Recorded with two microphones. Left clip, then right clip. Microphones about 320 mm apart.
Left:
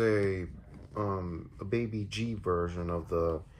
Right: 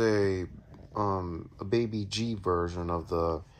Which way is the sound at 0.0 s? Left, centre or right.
Centre.